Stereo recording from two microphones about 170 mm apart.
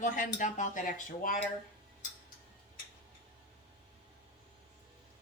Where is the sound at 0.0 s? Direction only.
50° left (ahead or behind).